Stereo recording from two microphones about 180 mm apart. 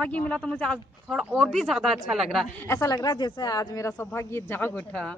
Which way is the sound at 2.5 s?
15° left (ahead or behind).